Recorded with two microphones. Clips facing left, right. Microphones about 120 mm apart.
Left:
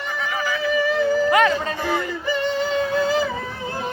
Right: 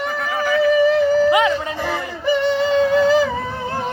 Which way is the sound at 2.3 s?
85° right.